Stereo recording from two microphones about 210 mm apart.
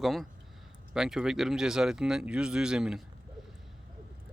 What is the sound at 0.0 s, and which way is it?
Speech, centre (ahead or behind).